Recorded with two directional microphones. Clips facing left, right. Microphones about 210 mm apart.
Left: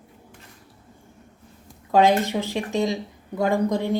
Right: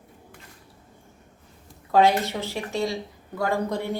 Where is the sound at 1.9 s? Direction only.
15° left (ahead or behind).